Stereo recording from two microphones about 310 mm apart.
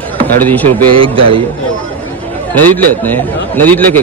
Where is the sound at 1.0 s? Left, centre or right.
Centre.